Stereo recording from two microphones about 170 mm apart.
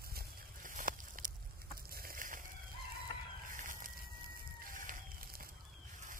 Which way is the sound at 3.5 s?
50° right (ahead or behind).